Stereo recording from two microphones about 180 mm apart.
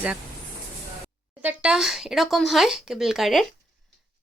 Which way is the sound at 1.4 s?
5° right (ahead or behind).